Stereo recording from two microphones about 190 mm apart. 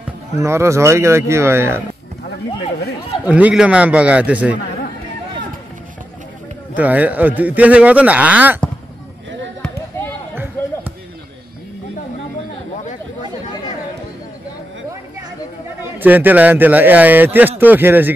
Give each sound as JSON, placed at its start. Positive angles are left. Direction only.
{"t": 0.4, "sound": "a man's voice", "side_deg": -15}
{"t": 3.3, "sound": "a man's voice", "side_deg": -5}
{"t": 6.7, "sound": "a man's voice", "side_deg": -10}
{"t": 10.3, "sound": "a sound", "side_deg": -10}
{"t": 15.8, "sound": "a man's voice", "side_deg": -10}